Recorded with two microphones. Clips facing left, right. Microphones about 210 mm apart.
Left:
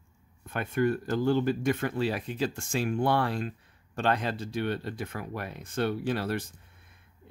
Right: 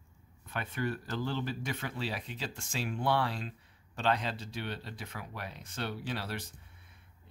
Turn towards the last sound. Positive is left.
turn(degrees=50)  # may be behind; listen again after turning